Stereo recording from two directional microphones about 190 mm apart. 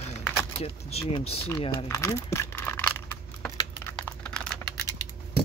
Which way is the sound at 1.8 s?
15° left (ahead or behind).